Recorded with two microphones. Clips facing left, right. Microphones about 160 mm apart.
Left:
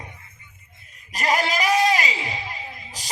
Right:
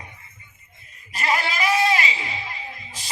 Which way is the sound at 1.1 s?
40° left (ahead or behind).